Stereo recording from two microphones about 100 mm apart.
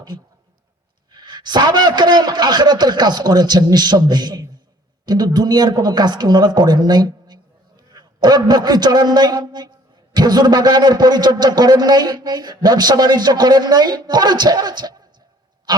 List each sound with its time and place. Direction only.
1.1 s a man's voice: 45° right (ahead or behind)